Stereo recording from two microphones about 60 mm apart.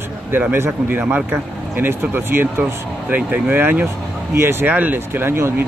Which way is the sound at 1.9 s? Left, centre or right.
Right.